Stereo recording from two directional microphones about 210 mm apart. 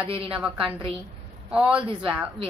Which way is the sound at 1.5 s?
5° right (ahead or behind).